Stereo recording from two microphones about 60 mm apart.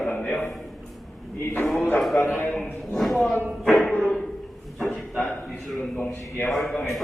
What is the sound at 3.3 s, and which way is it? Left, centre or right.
Speech, left.